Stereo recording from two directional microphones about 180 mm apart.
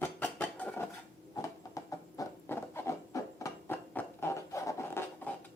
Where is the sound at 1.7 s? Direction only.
15° left (ahead or behind).